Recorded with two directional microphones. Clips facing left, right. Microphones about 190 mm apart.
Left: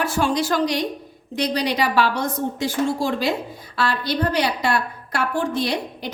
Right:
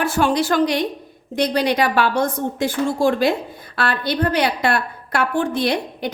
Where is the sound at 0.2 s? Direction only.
60° right (ahead or behind).